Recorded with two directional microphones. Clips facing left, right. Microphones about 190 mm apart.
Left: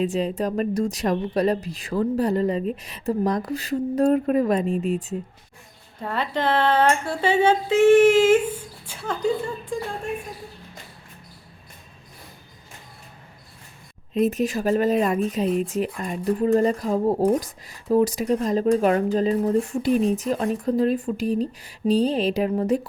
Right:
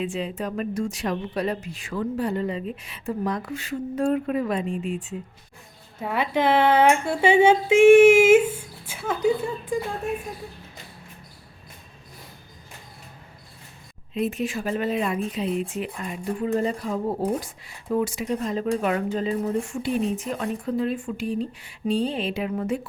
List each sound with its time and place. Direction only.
0.0 s speech: 40° left (ahead or behind)
6.0 s speech: 10° right (ahead or behind)
14.1 s speech: 40° left (ahead or behind)